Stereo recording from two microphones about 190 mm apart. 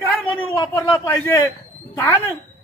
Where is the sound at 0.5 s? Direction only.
20° left (ahead or behind).